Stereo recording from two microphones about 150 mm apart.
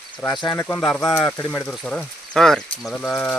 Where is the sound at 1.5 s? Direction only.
5° left (ahead or behind).